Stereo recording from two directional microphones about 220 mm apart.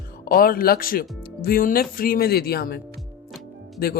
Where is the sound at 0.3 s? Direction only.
40° left (ahead or behind).